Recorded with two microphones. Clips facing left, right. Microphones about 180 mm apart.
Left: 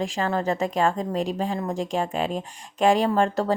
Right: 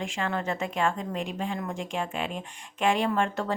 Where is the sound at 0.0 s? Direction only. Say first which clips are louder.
Left 5 dB; 40° left (ahead or behind).